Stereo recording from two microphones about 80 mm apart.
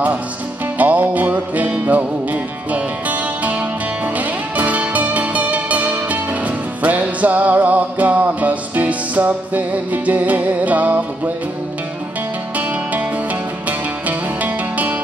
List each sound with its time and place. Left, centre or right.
0.7 s music: centre
13.7 s music: centre